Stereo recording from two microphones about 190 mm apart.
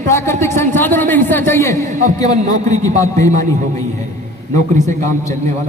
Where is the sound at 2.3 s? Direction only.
35° right (ahead or behind).